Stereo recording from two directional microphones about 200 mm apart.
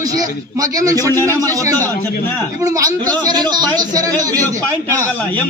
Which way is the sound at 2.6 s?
15° right (ahead or behind).